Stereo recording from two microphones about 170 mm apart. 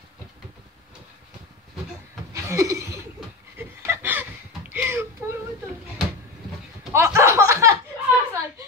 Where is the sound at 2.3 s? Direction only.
15° right (ahead or behind).